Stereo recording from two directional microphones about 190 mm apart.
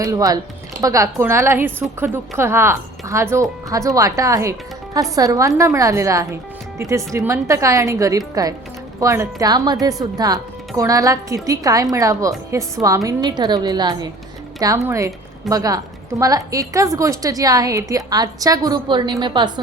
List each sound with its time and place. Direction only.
0.0 s a woman's voice: 20° right (ahead or behind)